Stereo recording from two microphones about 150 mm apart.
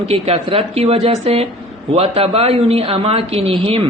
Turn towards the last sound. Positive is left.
turn(degrees=-40)  # may be behind; listen again after turning